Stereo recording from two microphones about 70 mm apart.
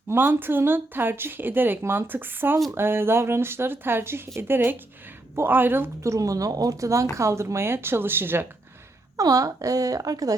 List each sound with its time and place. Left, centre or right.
0.1 s speech: right
6.0 s speech: right
9.1 s speech: right